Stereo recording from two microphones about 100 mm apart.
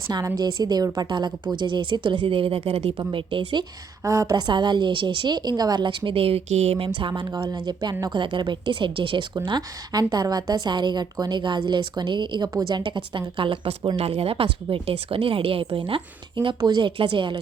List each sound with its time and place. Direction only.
0.3 s a woman's voice: 40° right (ahead or behind); by 2.9 s 90° right
3.0 s a woman's voice: 55° right (ahead or behind)
4.0 s a woman's voice: 30° right (ahead or behind)
4.4 s a woman's voice: 50° right (ahead or behind)
7.2 s a woman's voice: 45° right (ahead or behind)
8.0 s a woman's voice: 55° right (ahead or behind)